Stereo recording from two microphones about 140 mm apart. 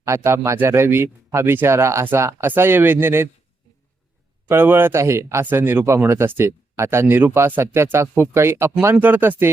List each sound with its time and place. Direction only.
0.0 s speech: 20° right (ahead or behind)
4.4 s speech: 15° right (ahead or behind)